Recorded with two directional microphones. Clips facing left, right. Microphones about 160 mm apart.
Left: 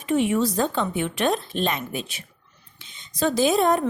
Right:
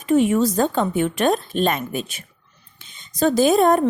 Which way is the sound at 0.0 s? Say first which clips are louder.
Right 4 dB; 40° right (ahead or behind).